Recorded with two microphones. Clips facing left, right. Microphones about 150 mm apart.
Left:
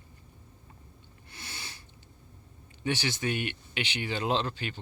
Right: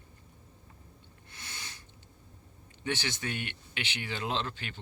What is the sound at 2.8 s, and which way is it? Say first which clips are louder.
Speech: left 4 dB; 15° left (ahead or behind).